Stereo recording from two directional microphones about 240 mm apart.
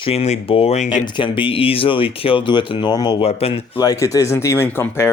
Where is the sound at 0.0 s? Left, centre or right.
Left.